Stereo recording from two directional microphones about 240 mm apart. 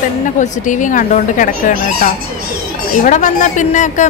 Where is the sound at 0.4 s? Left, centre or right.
Left.